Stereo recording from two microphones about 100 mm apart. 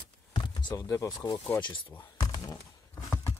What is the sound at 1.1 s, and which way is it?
Music, 50° left (ahead or behind).